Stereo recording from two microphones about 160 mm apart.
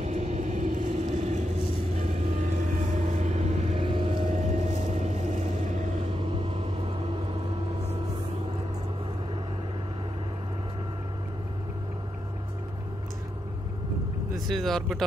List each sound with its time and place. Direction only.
0.0 s vehicle: 45° right (ahead or behind)
4.3 s vehicle: 45° right (ahead or behind)
14.5 s speech: centre (ahead or behind)